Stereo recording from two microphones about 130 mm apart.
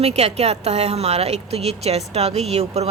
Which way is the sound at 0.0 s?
55° right (ahead or behind).